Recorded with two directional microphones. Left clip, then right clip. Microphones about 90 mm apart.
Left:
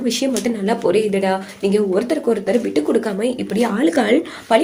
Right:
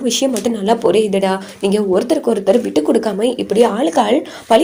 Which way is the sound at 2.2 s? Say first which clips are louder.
Right 4 dB; 55° right (ahead or behind).